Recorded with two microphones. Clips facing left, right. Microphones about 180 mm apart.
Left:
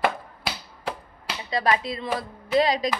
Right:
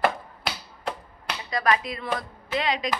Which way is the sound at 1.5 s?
30° left (ahead or behind).